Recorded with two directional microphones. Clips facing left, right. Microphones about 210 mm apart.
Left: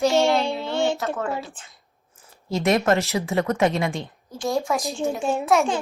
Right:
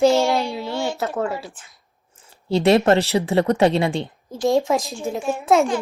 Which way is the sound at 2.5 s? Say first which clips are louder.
Right 5 dB; 30° right (ahead or behind).